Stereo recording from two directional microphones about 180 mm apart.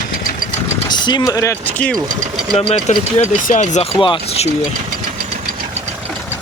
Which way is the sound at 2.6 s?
35° left (ahead or behind).